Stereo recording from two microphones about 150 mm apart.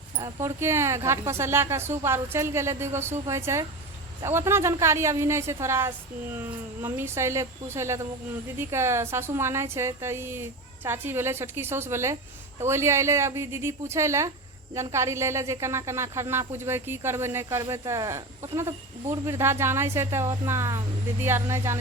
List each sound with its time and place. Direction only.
0.2 s speech: 20° right (ahead or behind)